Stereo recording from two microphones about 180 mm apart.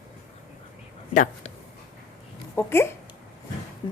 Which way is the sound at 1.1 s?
45° left (ahead or behind).